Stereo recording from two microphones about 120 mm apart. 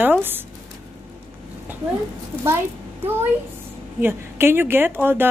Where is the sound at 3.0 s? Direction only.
20° right (ahead or behind).